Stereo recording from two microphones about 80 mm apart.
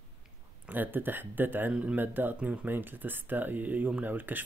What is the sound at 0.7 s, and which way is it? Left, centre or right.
Speech, right.